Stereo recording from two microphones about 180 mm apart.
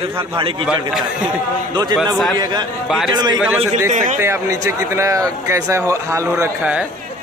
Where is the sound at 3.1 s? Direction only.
25° right (ahead or behind).